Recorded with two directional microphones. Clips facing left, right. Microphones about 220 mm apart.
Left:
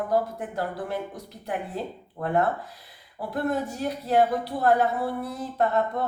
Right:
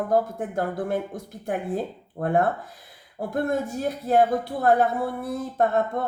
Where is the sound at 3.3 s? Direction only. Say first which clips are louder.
Right 2 dB; 50° right (ahead or behind).